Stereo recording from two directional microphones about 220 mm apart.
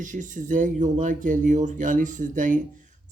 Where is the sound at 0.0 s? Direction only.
35° right (ahead or behind).